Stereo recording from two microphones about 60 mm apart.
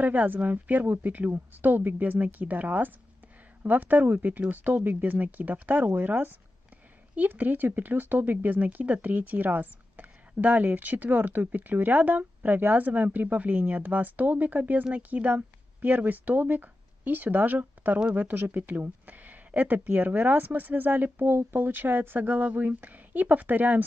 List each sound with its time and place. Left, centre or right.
0.0 s speech: right